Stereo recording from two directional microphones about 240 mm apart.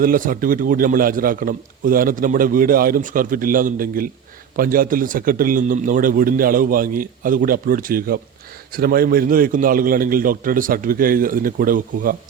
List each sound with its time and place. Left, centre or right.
0.0 s a man's voice: right